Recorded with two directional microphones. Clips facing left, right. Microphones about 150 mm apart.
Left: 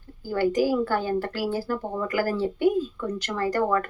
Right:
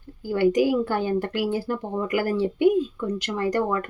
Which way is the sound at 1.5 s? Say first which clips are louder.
Right 1 dB; 20° right (ahead or behind).